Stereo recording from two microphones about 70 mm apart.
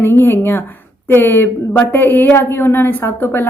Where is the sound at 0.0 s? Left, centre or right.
Left.